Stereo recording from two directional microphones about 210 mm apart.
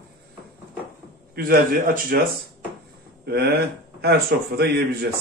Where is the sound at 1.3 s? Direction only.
45° right (ahead or behind).